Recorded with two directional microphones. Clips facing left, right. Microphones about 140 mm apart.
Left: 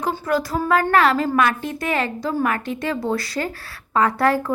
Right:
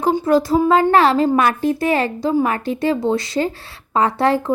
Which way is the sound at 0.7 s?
25° right (ahead or behind).